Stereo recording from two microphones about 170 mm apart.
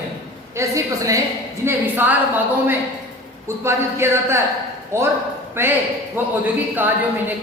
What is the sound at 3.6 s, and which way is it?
Speech, 15° right (ahead or behind).